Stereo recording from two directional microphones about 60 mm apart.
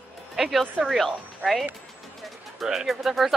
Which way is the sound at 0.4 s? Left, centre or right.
Centre.